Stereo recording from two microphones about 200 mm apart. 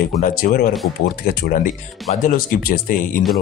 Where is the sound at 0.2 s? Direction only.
45° left (ahead or behind).